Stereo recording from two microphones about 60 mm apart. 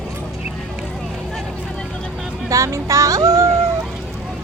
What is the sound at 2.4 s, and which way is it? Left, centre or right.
Music, right.